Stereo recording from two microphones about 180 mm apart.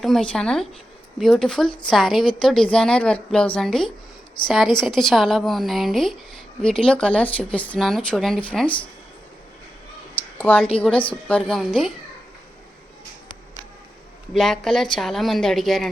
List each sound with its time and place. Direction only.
0.0 s speech: centre (ahead or behind)
1.6 s a woman's voice: 25° left (ahead or behind)
1.9 s speech: centre (ahead or behind)
10.3 s a sound: 10° left (ahead or behind)
11.1 s speech: 5° left (ahead or behind)
14.3 s speech: centre (ahead or behind)